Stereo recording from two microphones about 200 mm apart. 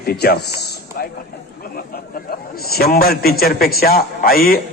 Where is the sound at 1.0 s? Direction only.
50° left (ahead or behind).